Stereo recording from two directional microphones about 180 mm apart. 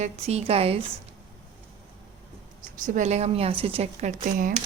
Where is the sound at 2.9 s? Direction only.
40° right (ahead or behind).